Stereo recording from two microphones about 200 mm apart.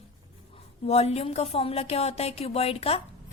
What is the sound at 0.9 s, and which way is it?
A woman's voice, 30° left (ahead or behind).